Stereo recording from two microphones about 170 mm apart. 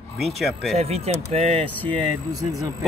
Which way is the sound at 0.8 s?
40° right (ahead or behind).